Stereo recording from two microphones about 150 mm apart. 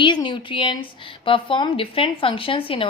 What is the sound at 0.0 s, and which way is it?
A woman's voice, 30° left (ahead or behind).